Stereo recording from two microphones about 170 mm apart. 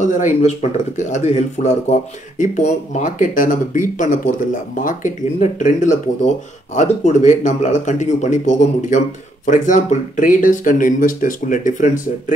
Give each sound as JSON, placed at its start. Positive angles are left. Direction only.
{"t": 0.0, "sound": "speech", "side_deg": 45}